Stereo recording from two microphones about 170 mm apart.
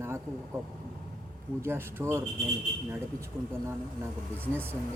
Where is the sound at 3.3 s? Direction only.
15° right (ahead or behind).